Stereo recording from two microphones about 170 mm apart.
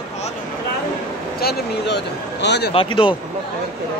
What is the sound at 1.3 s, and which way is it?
Speech, 70° left (ahead or behind).